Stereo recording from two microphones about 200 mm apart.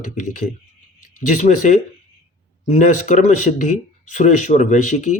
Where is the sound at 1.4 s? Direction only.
40° left (ahead or behind).